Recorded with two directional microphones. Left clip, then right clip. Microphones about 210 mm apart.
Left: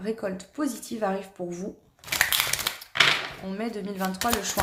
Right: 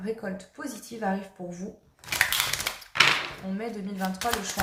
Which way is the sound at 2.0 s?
15° left (ahead or behind).